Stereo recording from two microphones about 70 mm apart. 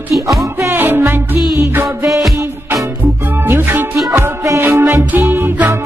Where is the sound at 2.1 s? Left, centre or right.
Centre.